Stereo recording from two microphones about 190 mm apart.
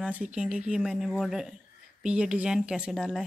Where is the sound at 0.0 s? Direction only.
5° right (ahead or behind).